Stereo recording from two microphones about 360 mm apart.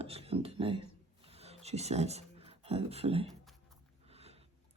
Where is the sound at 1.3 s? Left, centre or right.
Centre.